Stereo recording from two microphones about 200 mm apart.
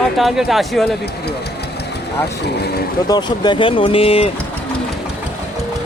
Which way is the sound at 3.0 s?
20° left (ahead or behind).